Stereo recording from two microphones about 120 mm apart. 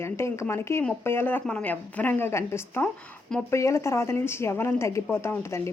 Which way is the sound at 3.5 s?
25° left (ahead or behind).